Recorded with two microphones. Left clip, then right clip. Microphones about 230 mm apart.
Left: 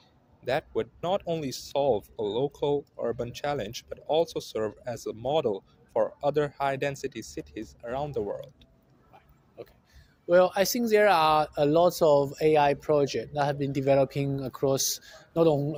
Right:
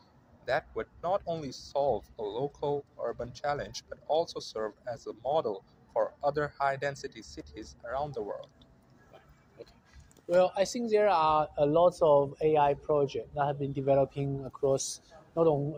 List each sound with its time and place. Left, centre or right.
0.4 s speech: left
9.6 s speech: left